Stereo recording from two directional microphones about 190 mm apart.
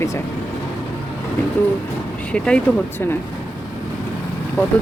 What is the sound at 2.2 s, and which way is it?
Speech, 5° left (ahead or behind).